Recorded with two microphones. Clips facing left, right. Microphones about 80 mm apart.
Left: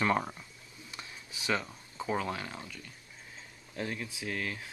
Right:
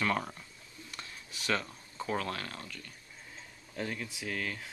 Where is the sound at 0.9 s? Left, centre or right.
Centre.